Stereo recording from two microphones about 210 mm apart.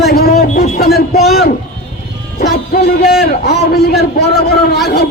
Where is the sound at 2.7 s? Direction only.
50° left (ahead or behind).